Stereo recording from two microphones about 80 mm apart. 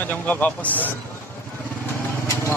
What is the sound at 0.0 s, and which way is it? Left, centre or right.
Speech, left.